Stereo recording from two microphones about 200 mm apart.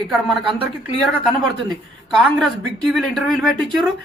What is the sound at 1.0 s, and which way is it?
Speech, centre (ahead or behind).